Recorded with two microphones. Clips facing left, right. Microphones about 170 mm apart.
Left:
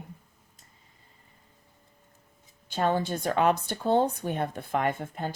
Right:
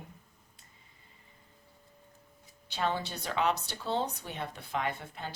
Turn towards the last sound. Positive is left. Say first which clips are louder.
# left 7 dB
turn(degrees=50)  # may be behind; listen again after turning